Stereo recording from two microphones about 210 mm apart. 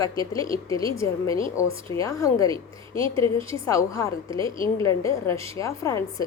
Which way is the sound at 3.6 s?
15° left (ahead or behind).